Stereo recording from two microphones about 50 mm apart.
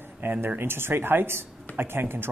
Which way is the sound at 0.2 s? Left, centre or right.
Right.